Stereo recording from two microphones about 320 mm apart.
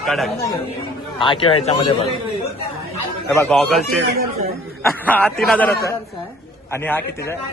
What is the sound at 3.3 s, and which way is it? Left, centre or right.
A man's voice, centre.